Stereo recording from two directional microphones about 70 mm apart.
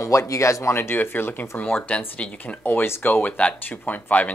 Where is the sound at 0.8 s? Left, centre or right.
Left.